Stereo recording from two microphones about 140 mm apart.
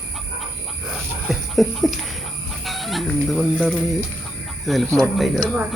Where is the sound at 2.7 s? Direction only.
Centre (ahead or behind).